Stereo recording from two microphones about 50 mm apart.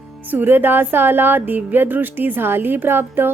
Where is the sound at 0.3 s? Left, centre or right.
Right.